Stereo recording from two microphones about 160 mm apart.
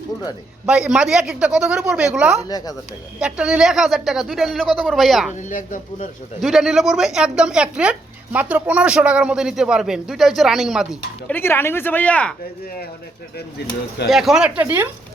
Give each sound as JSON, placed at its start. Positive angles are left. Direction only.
{"t": 0.6, "sound": "speech", "side_deg": -5}
{"t": 2.5, "sound": "speech", "side_deg": 25}
{"t": 3.2, "sound": "speech", "side_deg": -5}
{"t": 5.3, "sound": "speech", "side_deg": 50}
{"t": 6.4, "sound": "speech", "side_deg": -5}
{"t": 11.3, "sound": "speech", "side_deg": 15}
{"t": 13.6, "sound": "speech", "side_deg": 90}
{"t": 14.1, "sound": "speech", "side_deg": 0}